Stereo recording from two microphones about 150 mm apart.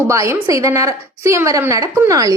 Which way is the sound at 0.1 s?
20° right (ahead or behind).